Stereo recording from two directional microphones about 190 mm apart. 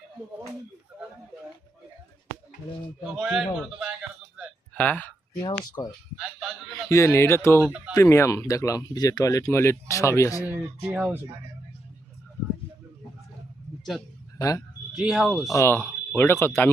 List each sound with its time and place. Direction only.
3.0 s a man's voice: 5° right (ahead or behind)
4.7 s speech: 10° left (ahead or behind)
5.4 s speech: 20° left (ahead or behind)
6.1 s a sound: centre (ahead or behind)
6.8 s speech: 15° left (ahead or behind)
7.6 s speech: 5° right (ahead or behind)
7.9 s speech: 15° left (ahead or behind)
10.8 s speech: 10° right (ahead or behind)
14.3 s speech: 20° left (ahead or behind)
14.9 s a man's voice: 5° right (ahead or behind)
15.5 s speech: 10° left (ahead or behind)